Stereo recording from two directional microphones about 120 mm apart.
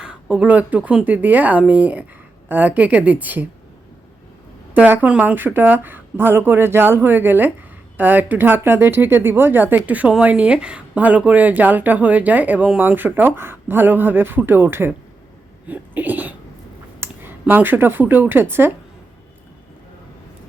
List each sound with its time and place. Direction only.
0.0 s speech: 5° right (ahead or behind)
4.7 s speech: 15° right (ahead or behind)